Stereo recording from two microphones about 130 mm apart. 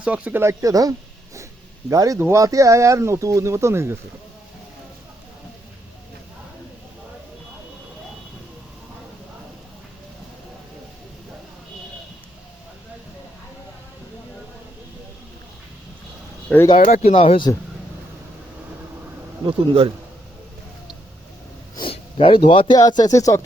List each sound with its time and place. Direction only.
0.0 s speech: 10° right (ahead or behind)
16.5 s speech: 5° left (ahead or behind)
17.0 s speech: 50° left (ahead or behind)
19.5 s speech: 45° right (ahead or behind)
21.8 s speech: 45° left (ahead or behind); by 23.4 s 25° left (ahead or behind)